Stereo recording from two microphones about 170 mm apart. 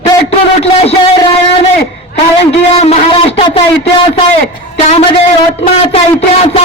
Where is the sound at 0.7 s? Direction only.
35° left (ahead or behind).